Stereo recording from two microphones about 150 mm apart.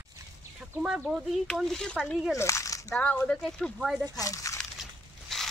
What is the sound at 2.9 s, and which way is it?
Speech, 10° left (ahead or behind).